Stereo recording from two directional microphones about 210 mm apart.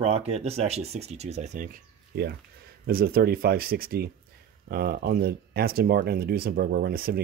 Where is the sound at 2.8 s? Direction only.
45° right (ahead or behind).